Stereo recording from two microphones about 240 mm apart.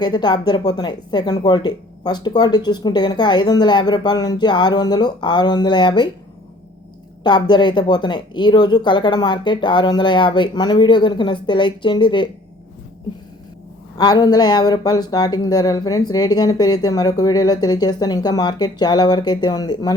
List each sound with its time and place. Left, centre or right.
0.0 s speech: centre
7.3 s speech: centre
13.9 s speech: centre